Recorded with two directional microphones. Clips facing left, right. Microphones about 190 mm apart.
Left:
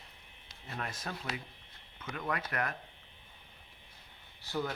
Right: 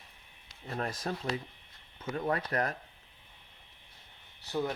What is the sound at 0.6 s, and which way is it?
Speech, 35° right (ahead or behind).